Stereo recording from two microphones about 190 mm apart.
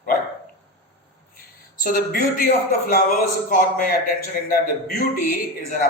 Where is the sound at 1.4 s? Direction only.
50° left (ahead or behind).